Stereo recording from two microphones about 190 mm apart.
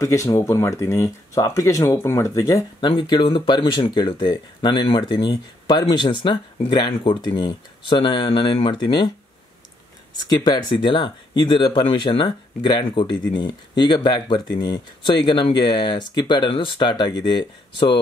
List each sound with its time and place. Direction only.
0.0 s speech: 15° left (ahead or behind)
10.2 s speech: 20° left (ahead or behind)